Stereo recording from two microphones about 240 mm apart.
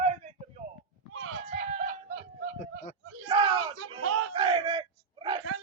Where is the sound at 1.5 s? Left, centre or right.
Right.